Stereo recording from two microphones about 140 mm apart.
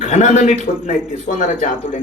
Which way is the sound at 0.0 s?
60° left (ahead or behind).